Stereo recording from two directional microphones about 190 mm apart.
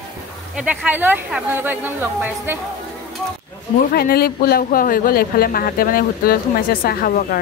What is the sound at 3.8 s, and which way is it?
Speech, 50° left (ahead or behind).